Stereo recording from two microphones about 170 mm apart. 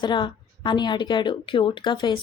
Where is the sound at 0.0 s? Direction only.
25° left (ahead or behind).